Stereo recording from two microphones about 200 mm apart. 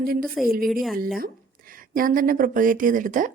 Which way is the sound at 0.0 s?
45° right (ahead or behind).